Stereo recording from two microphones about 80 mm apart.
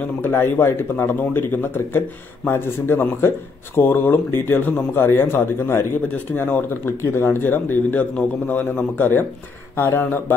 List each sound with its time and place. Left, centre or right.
0.0 s speech: left